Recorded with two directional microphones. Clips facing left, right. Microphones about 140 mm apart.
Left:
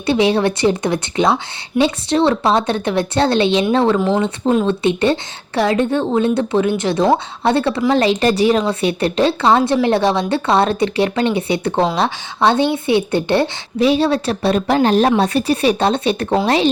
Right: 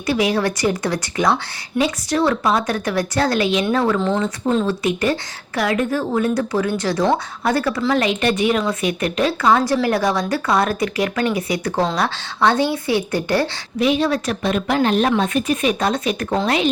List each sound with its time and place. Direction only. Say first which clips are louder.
0.0 s a woman's voice: left 4 dB; 25° left (ahead or behind)